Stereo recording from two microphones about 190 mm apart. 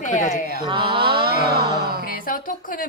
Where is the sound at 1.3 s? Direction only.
55° right (ahead or behind).